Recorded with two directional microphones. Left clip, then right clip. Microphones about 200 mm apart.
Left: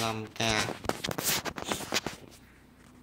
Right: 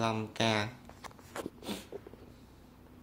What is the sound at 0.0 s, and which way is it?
Speech, 5° right (ahead or behind).